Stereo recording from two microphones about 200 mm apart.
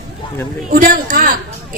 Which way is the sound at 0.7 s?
45° right (ahead or behind).